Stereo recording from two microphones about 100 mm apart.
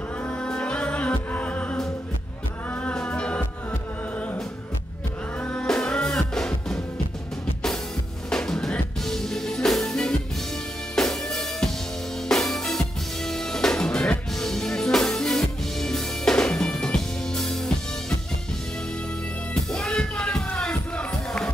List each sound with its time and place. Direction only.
0.2 s music: 10° left (ahead or behind)
5.4 s music: 10° left (ahead or behind)
8.3 s music: 5° left (ahead or behind)
19.5 s music: 10° left (ahead or behind)